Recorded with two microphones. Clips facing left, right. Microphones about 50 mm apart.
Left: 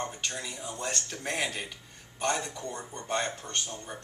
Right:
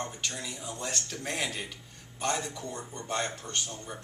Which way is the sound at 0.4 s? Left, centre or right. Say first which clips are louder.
Left 1 dB; centre.